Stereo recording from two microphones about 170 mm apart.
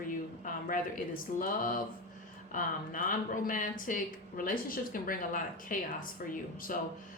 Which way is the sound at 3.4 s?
50° left (ahead or behind).